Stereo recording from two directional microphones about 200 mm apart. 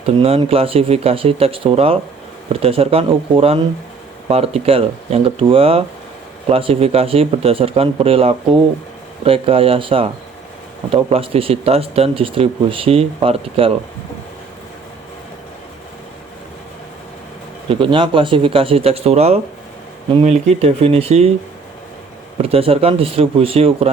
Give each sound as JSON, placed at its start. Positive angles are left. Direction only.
{"t": 0.0, "sound": "speech", "side_deg": -30}
{"t": 17.7, "sound": "speech", "side_deg": -25}
{"t": 20.5, "sound": "speech", "side_deg": -30}
{"t": 22.4, "sound": "speech", "side_deg": -30}